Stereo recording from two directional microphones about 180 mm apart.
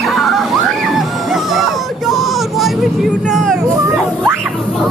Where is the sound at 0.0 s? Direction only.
Centre (ahead or behind).